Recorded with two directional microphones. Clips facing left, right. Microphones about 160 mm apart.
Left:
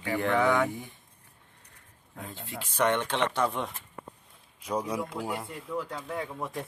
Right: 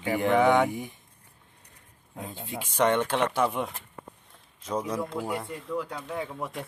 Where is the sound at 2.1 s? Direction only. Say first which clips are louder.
Right 3 dB; 15° right (ahead or behind).